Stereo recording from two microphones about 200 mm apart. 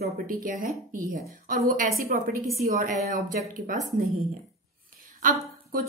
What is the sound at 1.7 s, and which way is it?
A woman's voice, 45° right (ahead or behind).